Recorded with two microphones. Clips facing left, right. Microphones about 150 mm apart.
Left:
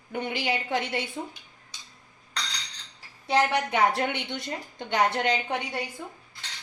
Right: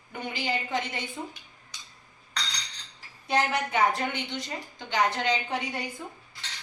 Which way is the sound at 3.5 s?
70° left (ahead or behind).